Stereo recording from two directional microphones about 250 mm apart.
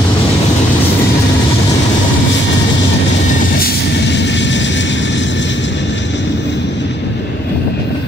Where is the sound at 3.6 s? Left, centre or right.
Left.